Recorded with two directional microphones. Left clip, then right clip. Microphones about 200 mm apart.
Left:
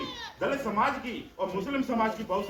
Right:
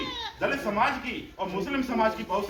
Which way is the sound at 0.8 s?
10° right (ahead or behind).